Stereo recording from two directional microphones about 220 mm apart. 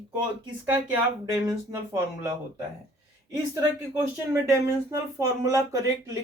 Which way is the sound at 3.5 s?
15° right (ahead or behind).